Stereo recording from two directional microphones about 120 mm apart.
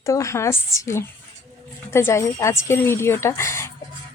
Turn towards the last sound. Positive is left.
turn(degrees=20)  # may be behind; listen again after turning